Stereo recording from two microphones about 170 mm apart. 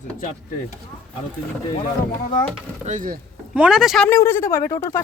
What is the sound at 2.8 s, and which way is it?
Speech, 50° right (ahead or behind).